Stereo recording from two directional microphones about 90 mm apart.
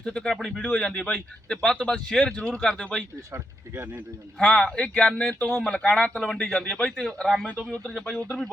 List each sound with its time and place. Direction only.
0.0 s speech: 5° left (ahead or behind)
3.3 s speech: 25° right (ahead or behind)
4.4 s speech: 10° left (ahead or behind)